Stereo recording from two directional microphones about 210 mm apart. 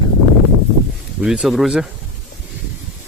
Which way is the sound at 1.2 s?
5° right (ahead or behind).